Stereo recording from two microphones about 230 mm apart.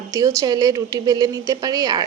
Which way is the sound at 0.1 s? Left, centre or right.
Centre.